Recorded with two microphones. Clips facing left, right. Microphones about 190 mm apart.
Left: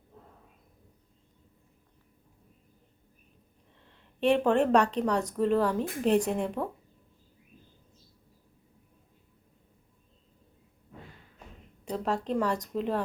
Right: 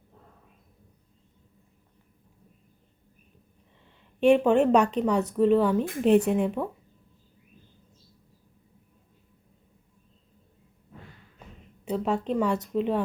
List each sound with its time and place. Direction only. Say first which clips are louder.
4.2 s a woman's voice: right 4 dB; 5° right (ahead or behind)
11.9 s speech: right 3 dB; 5° right (ahead or behind)